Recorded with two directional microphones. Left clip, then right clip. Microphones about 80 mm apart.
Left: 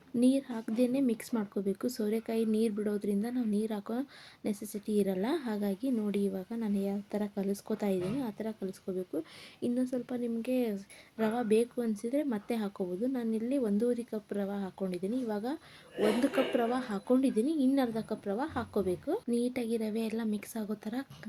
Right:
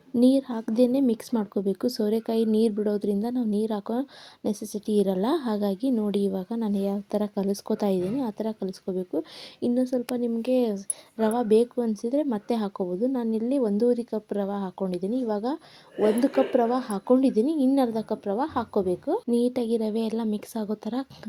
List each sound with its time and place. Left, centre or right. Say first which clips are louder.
0.2 s speech: right 8 dB; right
1.3 s speech: right 7 dB; right
11.2 s speech: right 7 dB; right
19.3 s speech: right 9 dB; right